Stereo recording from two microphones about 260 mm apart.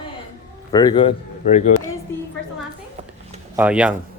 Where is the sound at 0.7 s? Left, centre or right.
Centre.